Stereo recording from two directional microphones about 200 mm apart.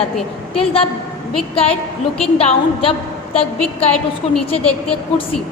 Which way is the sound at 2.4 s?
30° left (ahead or behind).